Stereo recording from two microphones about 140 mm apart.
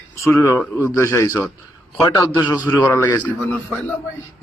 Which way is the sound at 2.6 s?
20° left (ahead or behind).